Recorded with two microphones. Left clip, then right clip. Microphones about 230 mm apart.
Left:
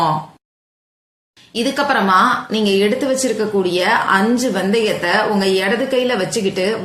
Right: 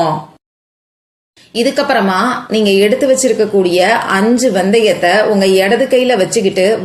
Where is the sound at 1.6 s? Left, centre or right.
Centre.